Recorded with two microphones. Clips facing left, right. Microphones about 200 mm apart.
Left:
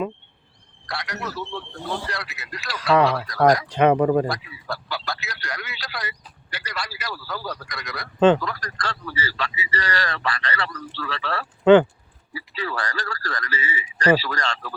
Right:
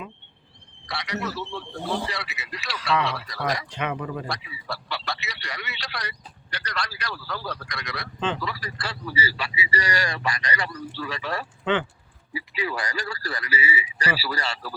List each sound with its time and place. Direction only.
0.9 s a man's voice: centre (ahead or behind)
3.7 s speech: 40° left (ahead or behind)
4.3 s a man's voice: centre (ahead or behind)
11.6 s speech: 40° left (ahead or behind)
12.3 s a man's voice: 15° right (ahead or behind)